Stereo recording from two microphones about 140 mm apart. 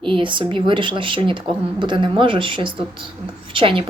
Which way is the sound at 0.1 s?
35° right (ahead or behind).